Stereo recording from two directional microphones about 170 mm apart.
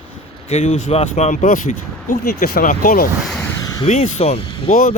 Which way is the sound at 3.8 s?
40° left (ahead or behind).